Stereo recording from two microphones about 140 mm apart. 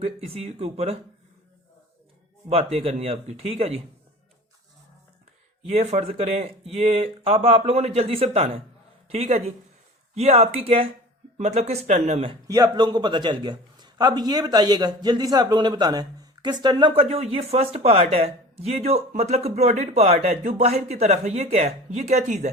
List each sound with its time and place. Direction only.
0.0 s speech: 50° right (ahead or behind)
2.5 s speech: 45° right (ahead or behind)
5.6 s speech: 55° right (ahead or behind)
11.3 s speech: 55° right (ahead or behind)
12.5 s a man's voice: 25° right (ahead or behind); by 22.4 s 55° right (ahead or behind)